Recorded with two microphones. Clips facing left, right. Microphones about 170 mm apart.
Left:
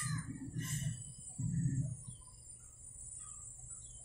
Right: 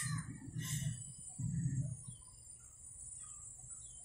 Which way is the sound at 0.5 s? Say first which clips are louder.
Left 2 dB; 25° right (ahead or behind).